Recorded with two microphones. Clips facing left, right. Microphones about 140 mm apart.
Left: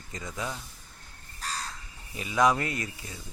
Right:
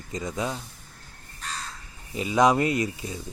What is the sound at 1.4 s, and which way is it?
Crow, 35° left (ahead or behind).